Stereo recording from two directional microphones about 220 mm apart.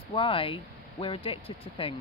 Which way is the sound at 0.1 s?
25° left (ahead or behind).